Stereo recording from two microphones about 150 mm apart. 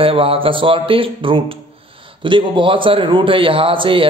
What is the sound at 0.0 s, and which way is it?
A man's voice, 35° right (ahead or behind).